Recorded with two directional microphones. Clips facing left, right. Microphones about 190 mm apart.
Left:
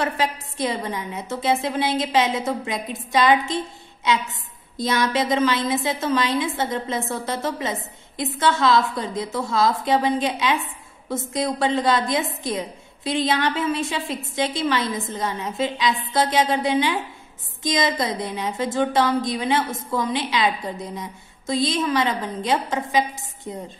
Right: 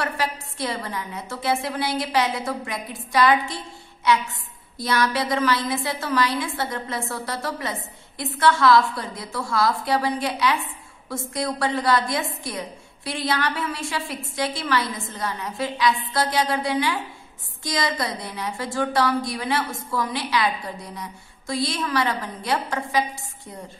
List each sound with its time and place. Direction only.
0.0 s a woman's voice: 20° left (ahead or behind)